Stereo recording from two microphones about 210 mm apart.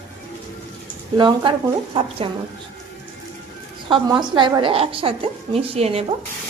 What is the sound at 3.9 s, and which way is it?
A woman's voice, 20° right (ahead or behind).